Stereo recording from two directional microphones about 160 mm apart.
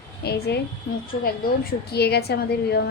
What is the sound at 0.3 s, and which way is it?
Speech, 85° left.